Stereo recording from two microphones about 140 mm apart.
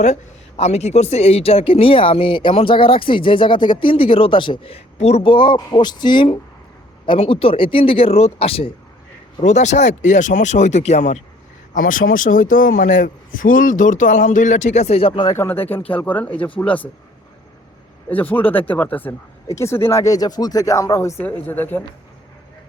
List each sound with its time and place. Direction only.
0.0 s speech: 55° left (ahead or behind)
9.4 s speech: 55° left (ahead or behind)
11.7 s a man's voice: 80° left; by 15.4 s 35° left (ahead or behind)
15.9 s speech: 10° left (ahead or behind)
18.1 s speech: 10° left (ahead or behind)